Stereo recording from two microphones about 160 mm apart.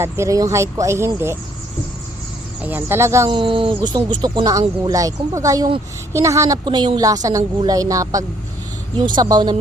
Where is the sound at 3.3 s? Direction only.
30° right (ahead or behind).